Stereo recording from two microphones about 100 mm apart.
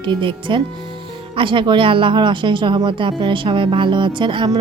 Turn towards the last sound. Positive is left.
turn(degrees=-50)  # may be behind; listen again after turning